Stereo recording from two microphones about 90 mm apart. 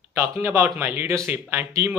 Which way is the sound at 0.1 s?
30° right (ahead or behind).